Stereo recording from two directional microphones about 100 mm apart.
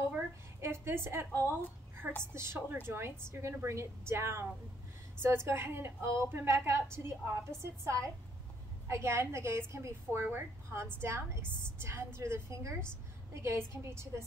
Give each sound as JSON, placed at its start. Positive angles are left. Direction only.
{"t": 0.1, "sound": "a sound", "side_deg": -25}
{"t": 1.5, "sound": "a woman's voice", "side_deg": -20}
{"t": 8.8, "sound": "a woman's voice", "side_deg": -25}